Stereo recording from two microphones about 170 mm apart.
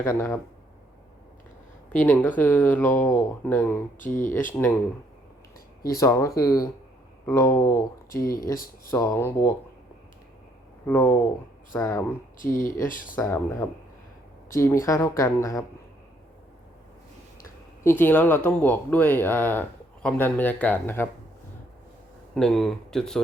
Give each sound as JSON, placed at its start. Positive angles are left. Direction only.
{"t": 0.0, "sound": "speech", "side_deg": 20}
{"t": 2.0, "sound": "speech", "side_deg": 10}
{"t": 3.9, "sound": "speech", "side_deg": 50}
{"t": 4.5, "sound": "speech", "side_deg": 10}
{"t": 6.0, "sound": "speech", "side_deg": 20}
{"t": 8.1, "sound": "speech", "side_deg": 55}
{"t": 8.9, "sound": "speech", "side_deg": 20}
{"t": 10.8, "sound": "speech", "side_deg": 10}
{"t": 12.4, "sound": "speech", "side_deg": 50}
{"t": 13.1, "sound": "speech", "side_deg": 15}
{"t": 17.8, "sound": "speech", "side_deg": 10}
{"t": 22.4, "sound": "speech", "side_deg": 5}